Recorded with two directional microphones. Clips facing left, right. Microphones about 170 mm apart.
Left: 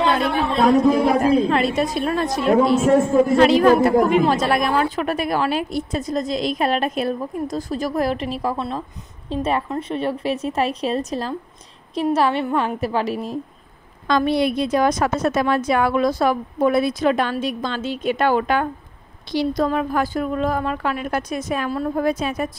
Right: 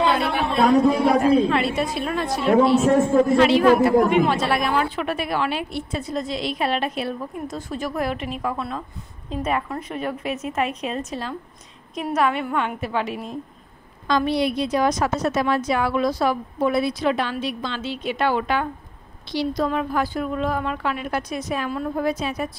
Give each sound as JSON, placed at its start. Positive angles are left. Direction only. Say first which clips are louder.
{"t": 0.6, "sound": "a man's voice", "louder": "left 1 dB", "side_deg": 0}
{"t": 1.2, "sound": "a woman's voice", "louder": "left 1 dB", "side_deg": 40}
{"t": 2.6, "sound": "a man's voice", "louder": "even", "side_deg": 0}
{"t": 3.3, "sound": "a woman's voice", "louder": "left 3 dB", "side_deg": 40}
{"t": 14.0, "sound": "a woman's voice", "louder": "left 2 dB", "side_deg": 55}